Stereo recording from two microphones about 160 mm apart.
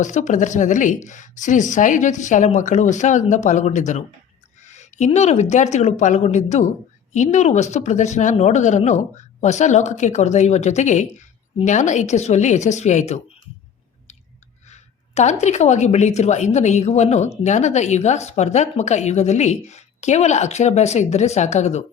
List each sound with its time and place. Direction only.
0.0 s a woman's voice: 50° left (ahead or behind)
14.7 s a woman's voice: 45° left (ahead or behind)